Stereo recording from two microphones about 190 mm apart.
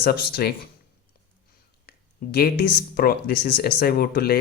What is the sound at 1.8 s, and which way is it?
Speech, 55° left (ahead or behind).